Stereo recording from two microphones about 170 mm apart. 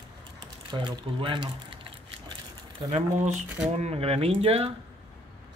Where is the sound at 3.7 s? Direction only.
40° right (ahead or behind).